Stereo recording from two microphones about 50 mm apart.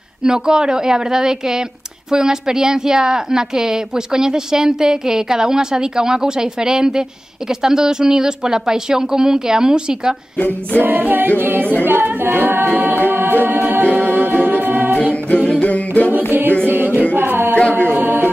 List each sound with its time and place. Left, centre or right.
0.2 s speech: centre
10.8 s a capella: right
13.1 s music: right
13.9 s a capella: right
15.6 s music: left
16.3 s a capella: right
16.6 s music: right